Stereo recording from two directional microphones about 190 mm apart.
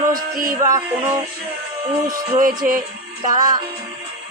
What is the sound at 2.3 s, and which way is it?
Music, 45° right (ahead or behind).